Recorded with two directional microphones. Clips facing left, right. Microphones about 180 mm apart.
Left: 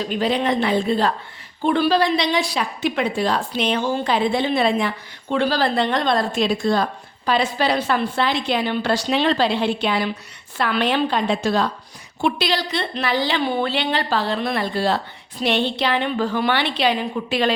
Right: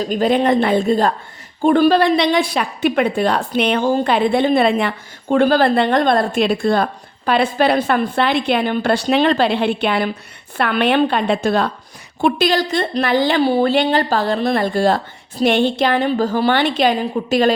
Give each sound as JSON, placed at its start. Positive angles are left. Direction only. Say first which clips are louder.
{"t": 0.0, "sound": "a woman's voice", "louder": "right 5 dB", "side_deg": -45}
{"t": 13.4, "sound": "a woman's voice", "louder": "right 7 dB", "side_deg": -35}